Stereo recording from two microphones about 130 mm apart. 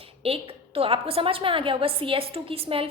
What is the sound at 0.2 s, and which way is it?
A woman's voice, 45° right (ahead or behind).